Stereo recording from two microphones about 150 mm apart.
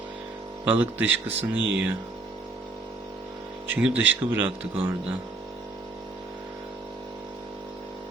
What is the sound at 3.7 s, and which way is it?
Speech, 10° right (ahead or behind).